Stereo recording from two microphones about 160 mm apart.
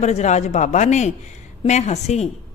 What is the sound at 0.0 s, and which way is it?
A woman's voice, 45° left (ahead or behind).